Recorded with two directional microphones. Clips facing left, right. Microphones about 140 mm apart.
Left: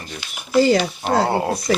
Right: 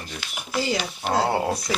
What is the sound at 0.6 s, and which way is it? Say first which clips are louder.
Speech: left 10 dB; 55° left (ahead or behind).